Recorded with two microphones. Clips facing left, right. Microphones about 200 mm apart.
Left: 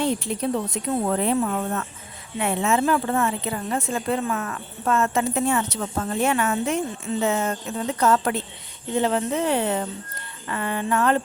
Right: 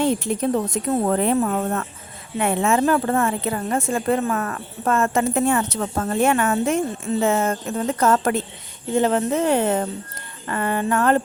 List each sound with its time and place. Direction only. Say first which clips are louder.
0.0 s speech: right 3 dB; 50° right (ahead or behind)